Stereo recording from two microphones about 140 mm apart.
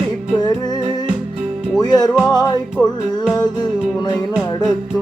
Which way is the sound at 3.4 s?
30° left (ahead or behind).